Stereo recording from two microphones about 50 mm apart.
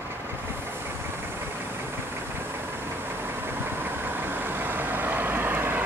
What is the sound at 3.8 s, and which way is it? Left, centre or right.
Vehicle, right.